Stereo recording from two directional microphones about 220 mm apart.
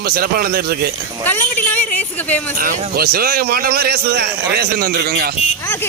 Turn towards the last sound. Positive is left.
turn(degrees=-45)  # may be behind; listen again after turning